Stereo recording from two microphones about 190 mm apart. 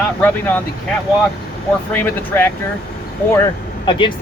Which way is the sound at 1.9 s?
10° left (ahead or behind).